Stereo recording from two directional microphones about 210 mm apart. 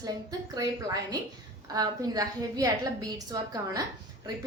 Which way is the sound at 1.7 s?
20° right (ahead or behind).